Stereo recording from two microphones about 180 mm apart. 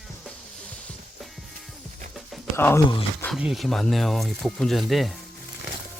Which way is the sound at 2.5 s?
15° left (ahead or behind).